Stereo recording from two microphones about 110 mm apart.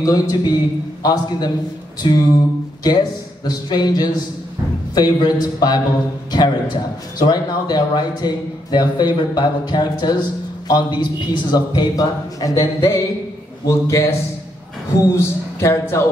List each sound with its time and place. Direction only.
0.0 s a man's voice: 35° left (ahead or behind)